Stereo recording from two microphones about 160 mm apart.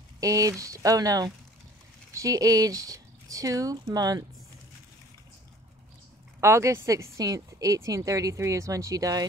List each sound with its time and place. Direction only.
0.2 s a woman's voice: 20° right (ahead or behind)
6.4 s a woman's voice: 15° right (ahead or behind)